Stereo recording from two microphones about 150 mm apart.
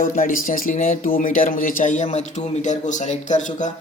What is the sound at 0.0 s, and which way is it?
Speech, 65° left (ahead or behind).